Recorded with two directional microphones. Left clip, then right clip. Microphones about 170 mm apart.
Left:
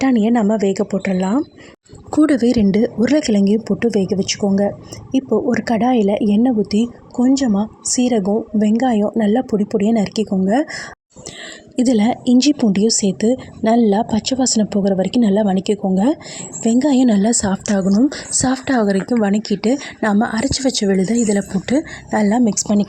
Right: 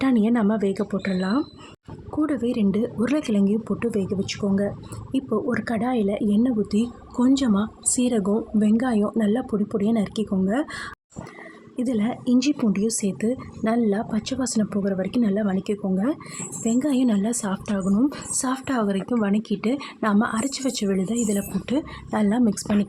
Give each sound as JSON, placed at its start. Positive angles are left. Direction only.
{"t": 0.0, "sound": "speech", "side_deg": 15}
{"t": 2.0, "sound": "a woman's voice", "side_deg": 40}
{"t": 7.2, "sound": "a woman's voice", "side_deg": 10}